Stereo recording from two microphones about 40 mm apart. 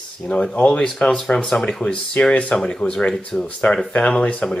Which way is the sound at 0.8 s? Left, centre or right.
Left.